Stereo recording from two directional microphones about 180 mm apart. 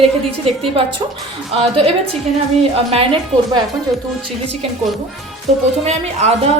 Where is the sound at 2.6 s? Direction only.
30° right (ahead or behind).